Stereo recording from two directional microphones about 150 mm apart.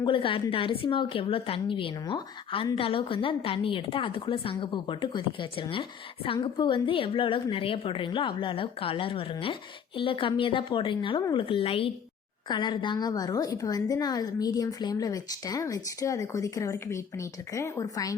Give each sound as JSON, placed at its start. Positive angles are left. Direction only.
{"t": 0.0, "sound": "a woman's voice", "side_deg": 35}